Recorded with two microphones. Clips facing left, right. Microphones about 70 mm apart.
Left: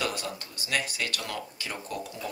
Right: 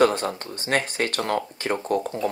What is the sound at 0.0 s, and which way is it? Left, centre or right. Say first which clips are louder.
Speech: right 12 dB; right.